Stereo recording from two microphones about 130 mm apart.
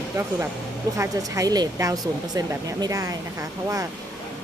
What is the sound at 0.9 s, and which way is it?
Speech, 25° right (ahead or behind).